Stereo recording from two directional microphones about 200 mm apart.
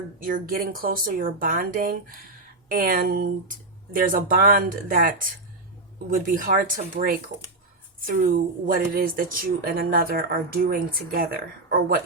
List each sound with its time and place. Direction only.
0.2 s speech: 45° right (ahead or behind)